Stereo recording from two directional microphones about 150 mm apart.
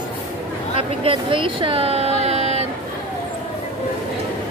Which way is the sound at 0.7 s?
40° right (ahead or behind).